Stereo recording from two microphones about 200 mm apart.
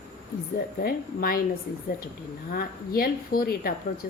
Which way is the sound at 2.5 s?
50° left (ahead or behind).